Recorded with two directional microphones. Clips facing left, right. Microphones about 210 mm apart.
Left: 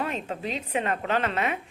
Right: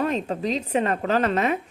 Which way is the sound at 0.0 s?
40° right (ahead or behind).